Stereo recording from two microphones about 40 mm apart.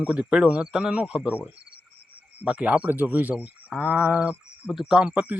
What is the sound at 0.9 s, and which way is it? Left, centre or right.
Speech, right.